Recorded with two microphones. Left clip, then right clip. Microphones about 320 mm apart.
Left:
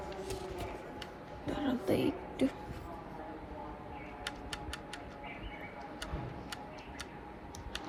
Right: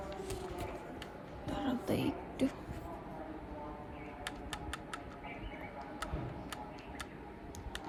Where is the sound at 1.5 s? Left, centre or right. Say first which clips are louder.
Left 3 dB; centre.